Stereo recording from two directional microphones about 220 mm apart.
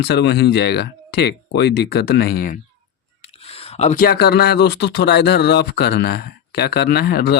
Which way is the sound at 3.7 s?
35° left (ahead or behind).